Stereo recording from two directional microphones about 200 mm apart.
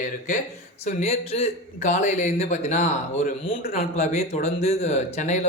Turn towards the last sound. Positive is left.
turn(degrees=35)  # may be behind; listen again after turning